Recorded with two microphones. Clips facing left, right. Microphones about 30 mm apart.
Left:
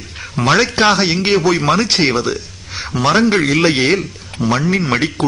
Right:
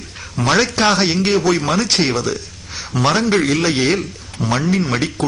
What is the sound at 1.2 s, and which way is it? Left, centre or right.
Speech, left.